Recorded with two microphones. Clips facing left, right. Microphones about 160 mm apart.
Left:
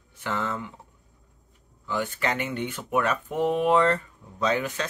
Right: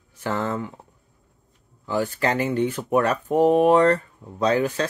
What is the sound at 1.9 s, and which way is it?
Speech, 35° right (ahead or behind).